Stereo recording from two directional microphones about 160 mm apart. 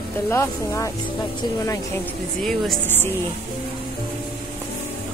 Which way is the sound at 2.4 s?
Centre (ahead or behind).